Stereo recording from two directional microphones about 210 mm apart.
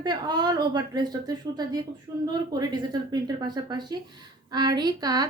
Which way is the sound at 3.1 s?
20° right (ahead or behind).